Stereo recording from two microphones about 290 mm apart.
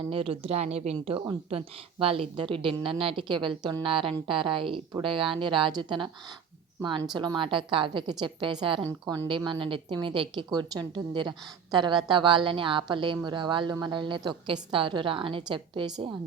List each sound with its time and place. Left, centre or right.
0.1 s a woman's voice: centre